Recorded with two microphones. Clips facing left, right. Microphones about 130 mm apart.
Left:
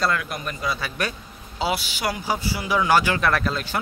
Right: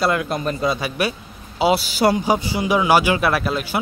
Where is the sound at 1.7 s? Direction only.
35° right (ahead or behind).